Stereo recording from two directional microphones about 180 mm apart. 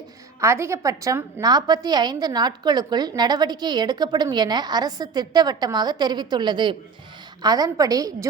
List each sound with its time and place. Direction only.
0.3 s a woman's voice: 15° right (ahead or behind)